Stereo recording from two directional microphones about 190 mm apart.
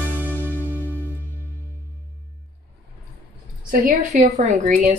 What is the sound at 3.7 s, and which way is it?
A woman's voice, 45° right (ahead or behind).